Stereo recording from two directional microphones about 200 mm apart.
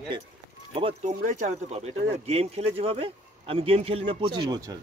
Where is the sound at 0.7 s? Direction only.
30° right (ahead or behind).